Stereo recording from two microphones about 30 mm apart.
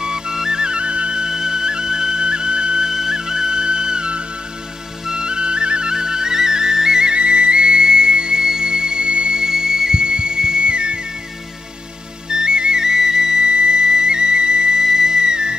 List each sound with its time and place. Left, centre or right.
0.0 s flute: centre
0.6 s music: right
1.2 s music: right
2.9 s music: centre
5.0 s flute: right
7.2 s music: right
12.4 s whistle: right